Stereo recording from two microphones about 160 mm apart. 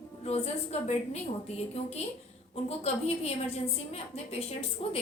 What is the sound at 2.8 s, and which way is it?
Speech, 40° left (ahead or behind).